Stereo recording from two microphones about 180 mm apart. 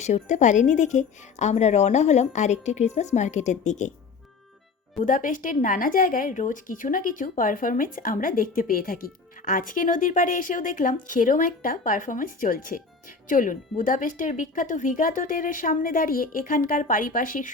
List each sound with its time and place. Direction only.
0.0 s a woman's voice: 40° left (ahead or behind)
5.0 s a woman's voice: 45° left (ahead or behind)